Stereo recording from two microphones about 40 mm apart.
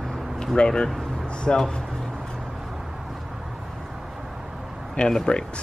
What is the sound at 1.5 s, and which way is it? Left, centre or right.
Speech, centre.